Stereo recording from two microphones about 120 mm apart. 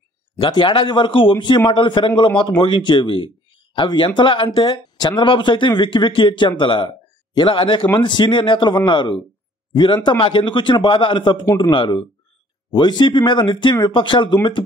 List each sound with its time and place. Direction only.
0.4 s speech: 40° left (ahead or behind)